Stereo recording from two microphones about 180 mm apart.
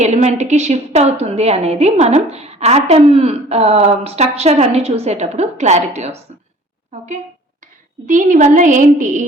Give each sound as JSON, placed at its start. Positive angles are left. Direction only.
{"t": 0.0, "sound": "a woman's voice", "side_deg": -40}
{"t": 8.0, "sound": "a woman's voice", "side_deg": -45}